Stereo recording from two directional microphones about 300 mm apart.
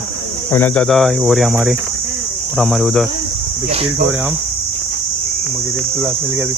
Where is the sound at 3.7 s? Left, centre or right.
Centre.